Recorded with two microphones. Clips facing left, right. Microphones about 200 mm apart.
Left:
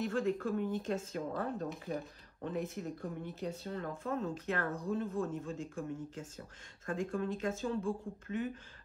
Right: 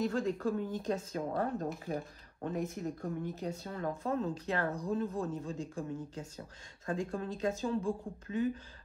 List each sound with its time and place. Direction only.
0.0 s speech: 35° right (ahead or behind)